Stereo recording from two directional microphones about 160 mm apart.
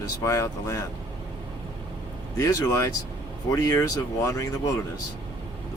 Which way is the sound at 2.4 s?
20° left (ahead or behind).